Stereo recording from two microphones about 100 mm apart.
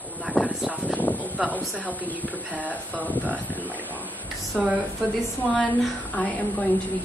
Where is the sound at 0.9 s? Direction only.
15° left (ahead or behind).